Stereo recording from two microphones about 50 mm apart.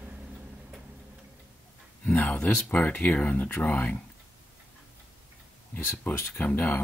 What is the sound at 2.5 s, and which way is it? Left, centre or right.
Speech, left.